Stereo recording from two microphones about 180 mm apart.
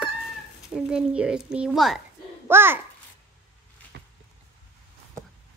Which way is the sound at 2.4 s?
10° right (ahead or behind).